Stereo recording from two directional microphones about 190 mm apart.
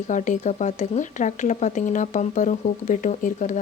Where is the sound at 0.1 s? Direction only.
40° left (ahead or behind).